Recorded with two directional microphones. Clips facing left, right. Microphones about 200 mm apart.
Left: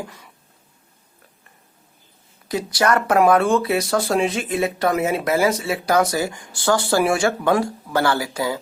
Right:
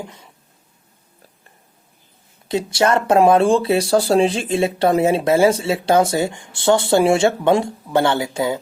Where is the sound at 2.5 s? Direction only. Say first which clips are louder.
Right 2 dB; 25° right (ahead or behind).